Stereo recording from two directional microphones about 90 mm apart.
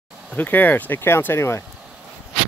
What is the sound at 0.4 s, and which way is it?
Speech, 20° left (ahead or behind).